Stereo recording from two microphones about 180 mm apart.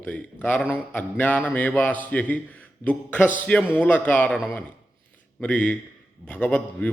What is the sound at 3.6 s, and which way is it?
Speech, 5° right (ahead or behind).